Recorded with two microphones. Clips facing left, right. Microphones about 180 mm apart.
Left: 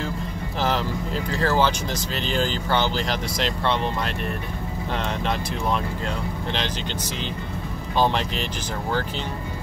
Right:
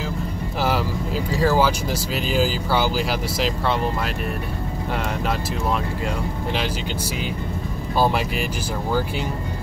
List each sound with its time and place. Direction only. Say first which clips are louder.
0.6 s speech: right 1 dB; 10° right (ahead or behind)
8.0 s speech: right 2 dB; 10° right (ahead or behind)